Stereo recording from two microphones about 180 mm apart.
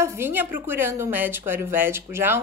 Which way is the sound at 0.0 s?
15° right (ahead or behind).